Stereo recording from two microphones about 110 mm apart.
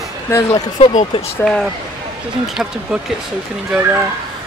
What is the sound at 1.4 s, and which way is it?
Speech, centre (ahead or behind).